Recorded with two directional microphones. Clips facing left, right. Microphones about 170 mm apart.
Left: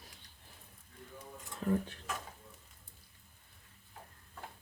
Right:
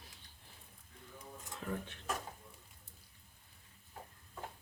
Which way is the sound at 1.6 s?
40° left (ahead or behind).